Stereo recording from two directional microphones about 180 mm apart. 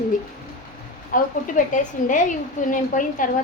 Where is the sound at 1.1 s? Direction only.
45° left (ahead or behind).